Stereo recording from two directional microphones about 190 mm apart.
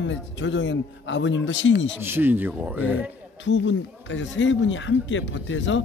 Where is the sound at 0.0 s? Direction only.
75° left (ahead or behind).